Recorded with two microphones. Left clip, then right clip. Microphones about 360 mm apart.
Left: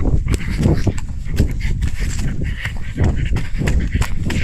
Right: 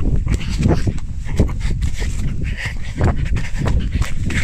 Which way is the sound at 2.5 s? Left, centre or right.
Centre.